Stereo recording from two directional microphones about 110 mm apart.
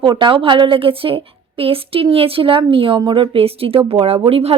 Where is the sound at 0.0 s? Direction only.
45° right (ahead or behind).